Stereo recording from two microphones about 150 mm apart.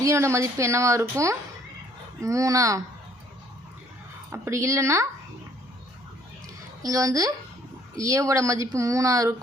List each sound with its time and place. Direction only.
0.0 s speech: 20° right (ahead or behind)
4.3 s speech: 20° right (ahead or behind)
6.8 s speech: 25° right (ahead or behind)